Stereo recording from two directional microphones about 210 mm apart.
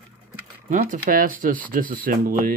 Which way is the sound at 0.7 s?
40° right (ahead or behind).